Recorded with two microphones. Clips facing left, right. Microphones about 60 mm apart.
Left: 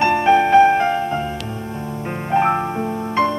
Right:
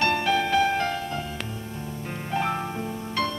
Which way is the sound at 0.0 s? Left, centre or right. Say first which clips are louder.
Left 9 dB; left.